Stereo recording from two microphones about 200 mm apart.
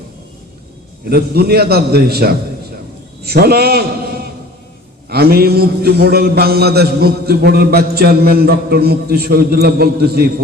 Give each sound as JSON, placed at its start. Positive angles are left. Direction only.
{"t": 1.1, "sound": "a man's voice", "side_deg": -50}